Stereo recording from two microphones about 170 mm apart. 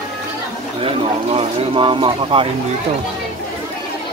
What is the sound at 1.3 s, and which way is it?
Speech, 30° right (ahead or behind).